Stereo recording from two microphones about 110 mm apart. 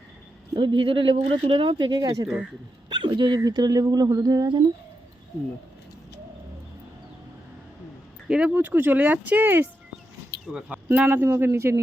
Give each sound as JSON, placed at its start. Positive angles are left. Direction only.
{"t": 0.5, "sound": "speech", "side_deg": -50}
{"t": 2.2, "sound": "speech", "side_deg": -10}
{"t": 2.9, "sound": "speech", "side_deg": -45}
{"t": 8.3, "sound": "speech", "side_deg": -10}
{"t": 10.7, "sound": "speech", "side_deg": -15}